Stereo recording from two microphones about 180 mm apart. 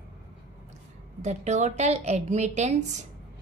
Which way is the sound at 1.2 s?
40° right (ahead or behind).